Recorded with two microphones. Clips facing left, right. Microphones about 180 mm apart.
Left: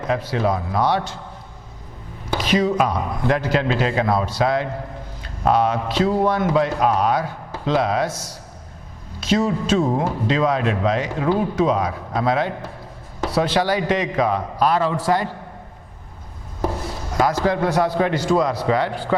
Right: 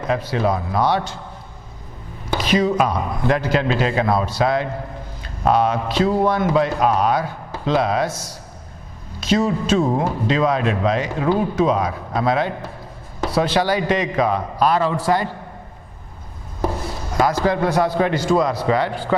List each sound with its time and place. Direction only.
0.0 s speech: 15° right (ahead or behind)
2.3 s speech: 15° right (ahead or behind)
16.6 s chopping: 30° right (ahead or behind)
17.2 s speech: 15° right (ahead or behind)